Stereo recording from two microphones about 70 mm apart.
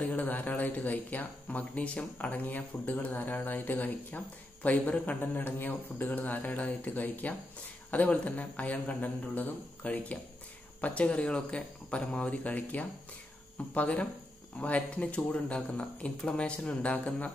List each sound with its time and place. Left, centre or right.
0.1 s speech: left